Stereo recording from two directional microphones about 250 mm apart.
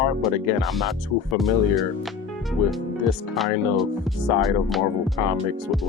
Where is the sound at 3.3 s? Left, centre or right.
Centre.